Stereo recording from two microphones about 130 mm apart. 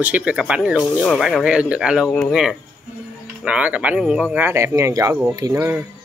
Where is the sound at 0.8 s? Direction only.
5° left (ahead or behind).